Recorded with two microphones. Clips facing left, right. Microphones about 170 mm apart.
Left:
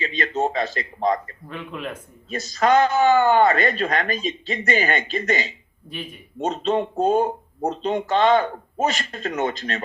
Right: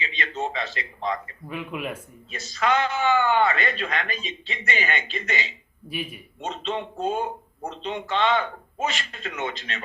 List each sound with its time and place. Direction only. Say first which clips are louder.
0.0 s speech: left 6 dB; 40° left (ahead or behind)
1.5 s speech: right 1 dB; 10° right (ahead or behind)
2.3 s speech: left 6 dB; 40° left (ahead or behind)
5.9 s speech: right 2 dB; 10° right (ahead or behind)
6.4 s speech: left 8 dB; 40° left (ahead or behind)